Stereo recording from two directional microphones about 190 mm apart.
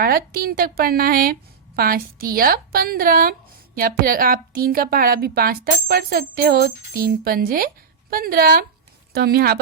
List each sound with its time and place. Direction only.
0.0 s a woman's voice: 50° right (ahead or behind)